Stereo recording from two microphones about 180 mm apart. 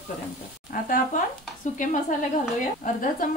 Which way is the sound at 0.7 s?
50° left (ahead or behind).